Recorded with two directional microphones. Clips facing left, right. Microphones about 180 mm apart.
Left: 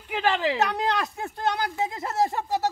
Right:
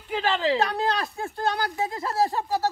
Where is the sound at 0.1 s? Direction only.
15° left (ahead or behind).